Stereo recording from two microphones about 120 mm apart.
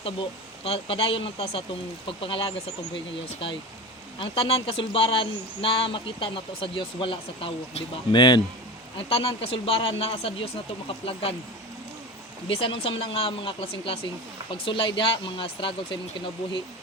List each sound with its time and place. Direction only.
0.0 s speech: 50° left (ahead or behind)
4.2 s speech: 50° left (ahead or behind)
8.1 s speech: 40° left (ahead or behind)
9.0 s speech: 50° left (ahead or behind)
12.5 s speech: 50° left (ahead or behind)